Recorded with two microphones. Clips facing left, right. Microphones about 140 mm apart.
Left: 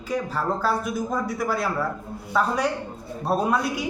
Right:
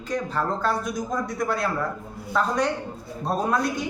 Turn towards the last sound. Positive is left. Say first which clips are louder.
# left 1 dB
turn(degrees=10)  # may be behind; listen again after turning